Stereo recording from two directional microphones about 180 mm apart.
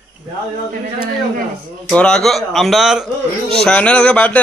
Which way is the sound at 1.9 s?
5° left (ahead or behind).